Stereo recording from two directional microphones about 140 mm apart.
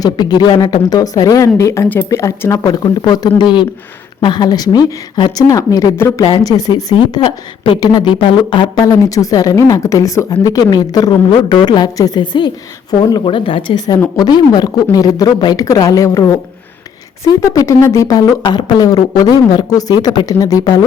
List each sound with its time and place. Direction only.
0.0 s a woman's voice: 30° left (ahead or behind)
6.2 s a woman's voice: 35° left (ahead or behind)